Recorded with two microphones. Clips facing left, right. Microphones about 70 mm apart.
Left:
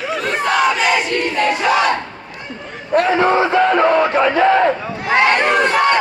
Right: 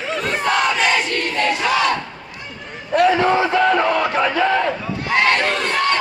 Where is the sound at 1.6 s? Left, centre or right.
Left.